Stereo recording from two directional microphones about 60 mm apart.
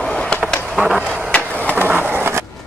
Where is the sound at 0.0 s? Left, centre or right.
Centre.